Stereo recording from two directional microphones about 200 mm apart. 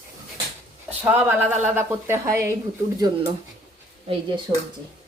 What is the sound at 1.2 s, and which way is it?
A woman's voice, 10° right (ahead or behind).